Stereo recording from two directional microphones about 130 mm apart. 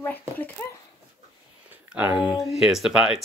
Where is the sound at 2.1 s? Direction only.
35° left (ahead or behind).